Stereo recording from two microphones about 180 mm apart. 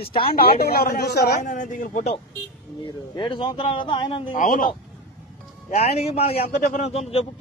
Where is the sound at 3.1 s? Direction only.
25° left (ahead or behind).